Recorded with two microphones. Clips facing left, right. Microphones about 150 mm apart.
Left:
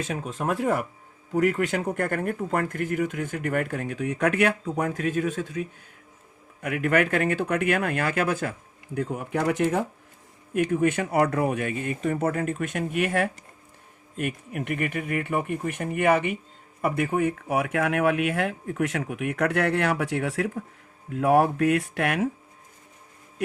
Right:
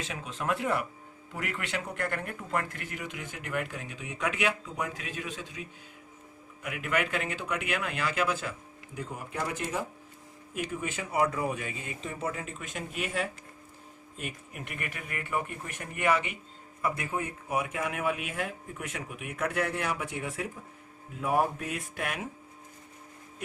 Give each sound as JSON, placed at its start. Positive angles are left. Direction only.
{"t": 0.0, "sound": "speech", "side_deg": 45}